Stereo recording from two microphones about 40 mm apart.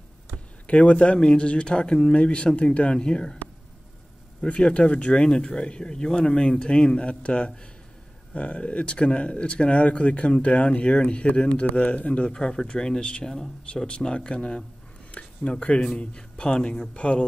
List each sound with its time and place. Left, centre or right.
0.7 s speech: left
4.5 s speech: left
12.3 s speech: left